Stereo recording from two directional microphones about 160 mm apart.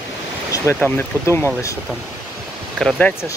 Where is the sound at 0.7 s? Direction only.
10° left (ahead or behind).